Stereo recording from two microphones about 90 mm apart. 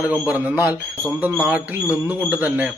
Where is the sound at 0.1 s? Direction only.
15° right (ahead or behind).